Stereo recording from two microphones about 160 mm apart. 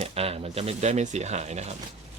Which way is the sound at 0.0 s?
40° right (ahead or behind).